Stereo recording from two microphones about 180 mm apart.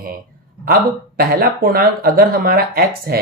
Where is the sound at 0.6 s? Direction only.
55° right (ahead or behind).